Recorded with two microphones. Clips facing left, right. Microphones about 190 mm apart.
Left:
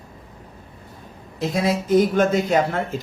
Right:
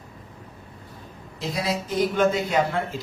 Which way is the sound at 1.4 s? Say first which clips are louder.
Left 5 dB; 50° left (ahead or behind).